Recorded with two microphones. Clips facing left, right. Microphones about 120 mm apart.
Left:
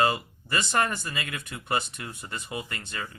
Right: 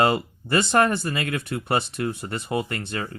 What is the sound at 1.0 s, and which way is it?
Speech, 45° right (ahead or behind).